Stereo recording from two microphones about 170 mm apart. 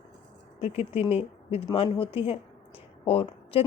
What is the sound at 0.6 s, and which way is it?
Speech, 40° left (ahead or behind).